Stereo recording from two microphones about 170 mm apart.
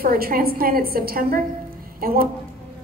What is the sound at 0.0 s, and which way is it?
A woman's voice, 60° right (ahead or behind).